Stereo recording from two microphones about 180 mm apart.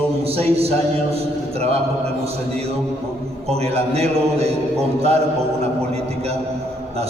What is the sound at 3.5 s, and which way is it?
A man's voice, 35° right (ahead or behind).